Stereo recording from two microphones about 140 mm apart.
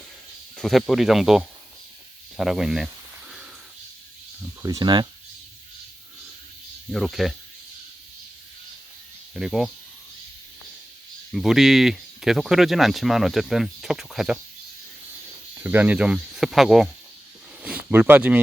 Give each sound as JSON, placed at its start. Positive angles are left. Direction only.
{"t": 0.5, "sound": "speech", "side_deg": 5}
{"t": 2.3, "sound": "snake", "side_deg": 0}
{"t": 4.6, "sound": "speech", "side_deg": -25}
{"t": 6.9, "sound": "speech", "side_deg": 0}
{"t": 9.3, "sound": "speech", "side_deg": -5}
{"t": 11.3, "sound": "speech", "side_deg": 0}
{"t": 15.5, "sound": "speech", "side_deg": -15}